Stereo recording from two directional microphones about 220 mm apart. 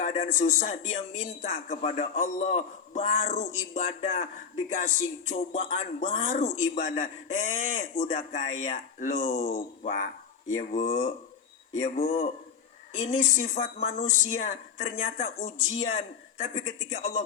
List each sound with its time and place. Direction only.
0.0 s a man's voice: 35° left (ahead or behind)